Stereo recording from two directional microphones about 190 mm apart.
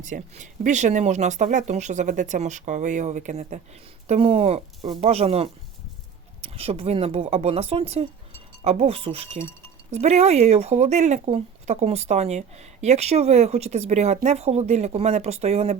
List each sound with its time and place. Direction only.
0.0 s speech: 40° right (ahead or behind)